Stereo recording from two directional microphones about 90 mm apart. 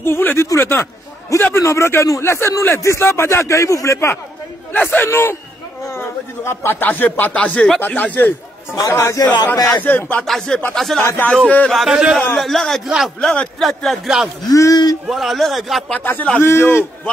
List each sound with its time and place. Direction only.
0.0 s a man's voice: 25° left (ahead or behind)
8.7 s a man's voice: 40° left (ahead or behind)
9.8 s a man's voice: 20° left (ahead or behind)
10.2 s a man's voice: 5° left (ahead or behind)
11.4 s a man's voice: 15° left (ahead or behind)
11.7 s a man's voice: 5° right (ahead or behind)
14.5 s a man's voice: 40° left (ahead or behind)
15.0 s a man's voice: centre (ahead or behind)
16.0 s a man's voice: 20° left (ahead or behind)